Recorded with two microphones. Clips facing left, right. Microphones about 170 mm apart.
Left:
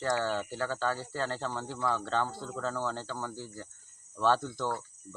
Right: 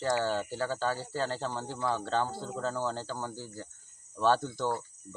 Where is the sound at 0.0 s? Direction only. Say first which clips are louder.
Right 1 dB; 5° right (ahead or behind).